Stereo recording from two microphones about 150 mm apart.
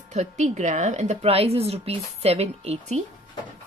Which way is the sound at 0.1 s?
50° right (ahead or behind).